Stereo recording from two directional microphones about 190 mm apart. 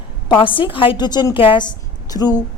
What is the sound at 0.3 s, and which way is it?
A woman's voice, 25° left (ahead or behind).